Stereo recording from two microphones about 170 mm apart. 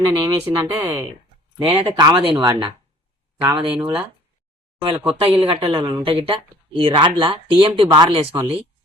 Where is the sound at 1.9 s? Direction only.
25° right (ahead or behind).